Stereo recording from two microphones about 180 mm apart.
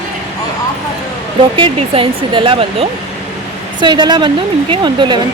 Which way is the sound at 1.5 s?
30° right (ahead or behind).